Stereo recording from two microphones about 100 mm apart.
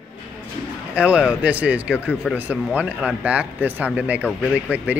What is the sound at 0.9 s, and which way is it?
A man's voice, 10° right (ahead or behind).